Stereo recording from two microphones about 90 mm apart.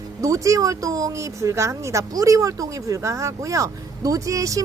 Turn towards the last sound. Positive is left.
turn(degrees=-40)  # may be behind; listen again after turning